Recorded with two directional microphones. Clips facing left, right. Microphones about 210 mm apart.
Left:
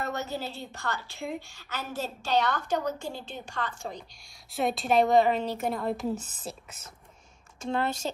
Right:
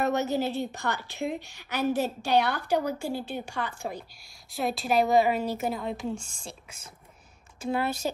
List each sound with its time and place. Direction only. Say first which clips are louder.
0.0 s a woman's voice: right 7 dB; 20° right (ahead or behind); by 6.1 s centre (ahead or behind)
7.6 s a woman's voice: right 1 dB; 10° right (ahead or behind)